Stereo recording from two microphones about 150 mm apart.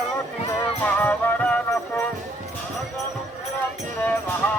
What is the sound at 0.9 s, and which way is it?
Music, 10° left (ahead or behind).